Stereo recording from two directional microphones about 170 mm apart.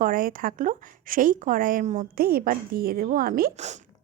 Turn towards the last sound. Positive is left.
turn(degrees=-60)  # may be behind; listen again after turning